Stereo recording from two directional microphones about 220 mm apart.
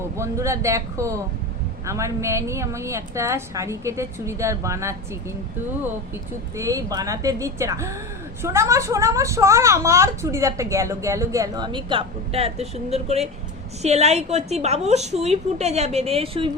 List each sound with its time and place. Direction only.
0.2 s a woman's voice: 15° right (ahead or behind)
6.6 s a woman's voice: 15° right (ahead or behind)